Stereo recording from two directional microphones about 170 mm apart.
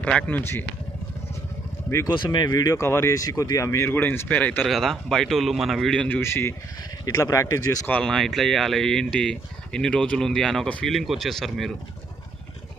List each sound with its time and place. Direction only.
0.0 s speech: 10° left (ahead or behind)
1.9 s speech: 15° left (ahead or behind); by 11.7 s centre (ahead or behind)